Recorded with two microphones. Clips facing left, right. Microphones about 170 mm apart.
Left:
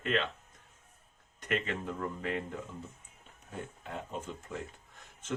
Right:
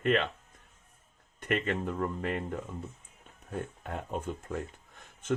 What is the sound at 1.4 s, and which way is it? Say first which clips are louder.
Speech: right 4 dB; 55° right (ahead or behind).